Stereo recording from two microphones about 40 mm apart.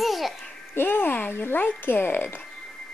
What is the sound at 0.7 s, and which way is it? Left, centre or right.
Speech, left.